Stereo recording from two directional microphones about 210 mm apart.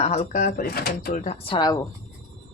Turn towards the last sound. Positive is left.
turn(degrees=20)  # may be behind; listen again after turning